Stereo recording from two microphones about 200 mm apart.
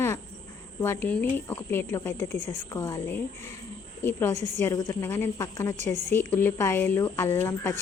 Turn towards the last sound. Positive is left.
turn(degrees=15)  # may be behind; listen again after turning